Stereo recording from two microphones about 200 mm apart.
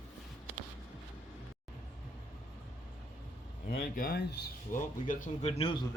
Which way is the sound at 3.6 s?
45° left (ahead or behind).